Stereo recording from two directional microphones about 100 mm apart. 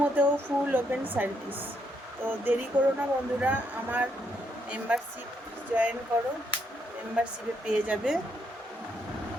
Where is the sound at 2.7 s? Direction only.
15° right (ahead or behind).